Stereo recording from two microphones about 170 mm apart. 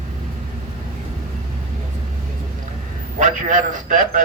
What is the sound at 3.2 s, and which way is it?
Speech, 50° right (ahead or behind).